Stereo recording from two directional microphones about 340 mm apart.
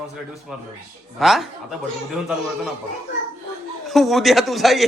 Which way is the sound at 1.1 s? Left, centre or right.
Centre.